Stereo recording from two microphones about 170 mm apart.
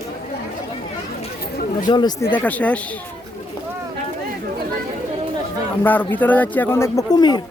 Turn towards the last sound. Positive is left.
turn(degrees=25)  # may be behind; listen again after turning